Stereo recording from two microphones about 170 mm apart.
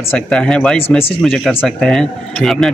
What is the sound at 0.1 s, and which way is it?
A man's voice, 5° left (ahead or behind).